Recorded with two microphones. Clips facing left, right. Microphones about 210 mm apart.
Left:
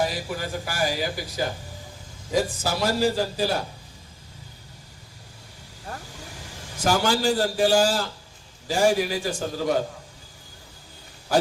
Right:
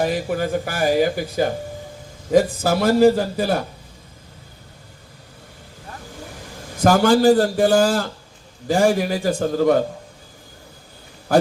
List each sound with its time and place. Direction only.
0.0 s a man's voice: 55° right (ahead or behind)
6.7 s a man's voice: 55° right (ahead or behind)